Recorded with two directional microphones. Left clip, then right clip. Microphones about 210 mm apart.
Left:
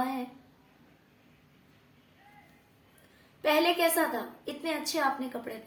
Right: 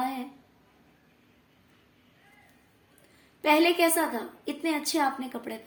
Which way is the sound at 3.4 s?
40° right (ahead or behind).